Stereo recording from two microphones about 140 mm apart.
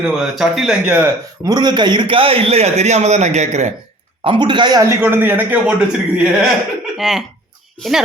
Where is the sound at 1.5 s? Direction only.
30° right (ahead or behind); by 3.7 s 55° right (ahead or behind).